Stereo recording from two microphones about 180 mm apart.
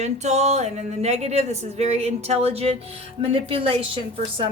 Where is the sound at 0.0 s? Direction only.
40° right (ahead or behind).